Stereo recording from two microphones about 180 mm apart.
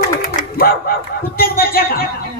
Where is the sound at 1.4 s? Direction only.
55° left (ahead or behind).